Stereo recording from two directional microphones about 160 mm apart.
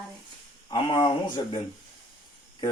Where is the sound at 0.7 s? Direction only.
30° left (ahead or behind).